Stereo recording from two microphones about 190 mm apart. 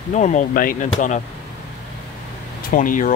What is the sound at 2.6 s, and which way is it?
Speech, 45° left (ahead or behind).